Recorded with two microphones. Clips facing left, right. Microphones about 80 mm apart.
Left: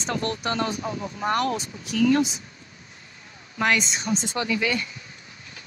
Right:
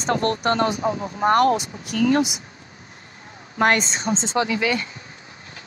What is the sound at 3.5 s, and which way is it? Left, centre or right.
A woman's voice, right.